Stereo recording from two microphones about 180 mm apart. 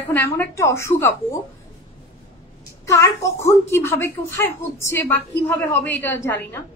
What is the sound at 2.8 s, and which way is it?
A woman's voice, 15° left (ahead or behind).